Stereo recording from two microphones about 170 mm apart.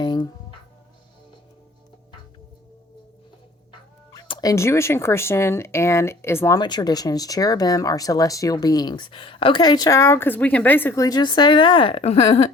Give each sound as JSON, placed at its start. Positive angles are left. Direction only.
{"t": 0.0, "sound": "music", "side_deg": 25}
{"t": 4.3, "sound": "speech", "side_deg": 20}